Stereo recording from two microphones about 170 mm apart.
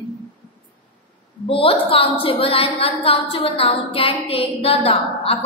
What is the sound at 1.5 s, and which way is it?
A woman's voice, 35° left (ahead or behind).